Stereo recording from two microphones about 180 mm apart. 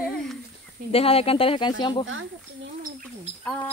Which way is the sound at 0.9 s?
35° left (ahead or behind).